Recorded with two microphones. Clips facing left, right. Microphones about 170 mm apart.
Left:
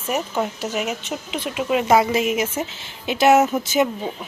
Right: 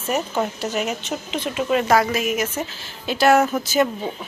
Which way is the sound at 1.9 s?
25° left (ahead or behind).